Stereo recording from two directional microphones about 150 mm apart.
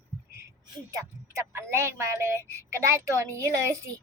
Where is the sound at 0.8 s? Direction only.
20° right (ahead or behind).